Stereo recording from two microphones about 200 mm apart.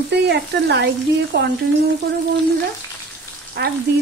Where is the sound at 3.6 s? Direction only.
55° right (ahead or behind).